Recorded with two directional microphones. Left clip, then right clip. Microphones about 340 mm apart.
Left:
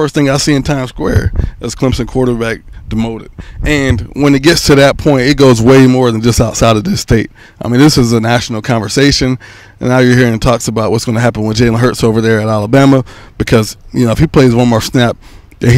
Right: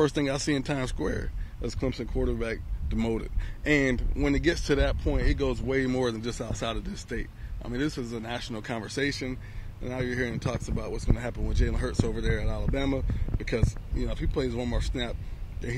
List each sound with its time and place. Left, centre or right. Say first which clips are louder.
0.0 s speech: left 15 dB; left
3.1 s speech: left 9 dB; left